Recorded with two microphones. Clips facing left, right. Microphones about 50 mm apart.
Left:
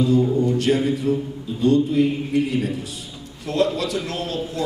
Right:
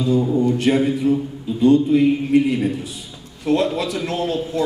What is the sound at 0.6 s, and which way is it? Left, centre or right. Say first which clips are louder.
Speech: right 2 dB; right.